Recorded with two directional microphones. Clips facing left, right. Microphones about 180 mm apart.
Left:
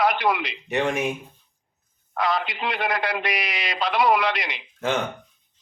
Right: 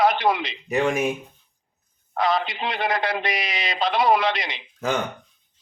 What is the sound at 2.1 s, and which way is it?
A man's voice, 25° right (ahead or behind).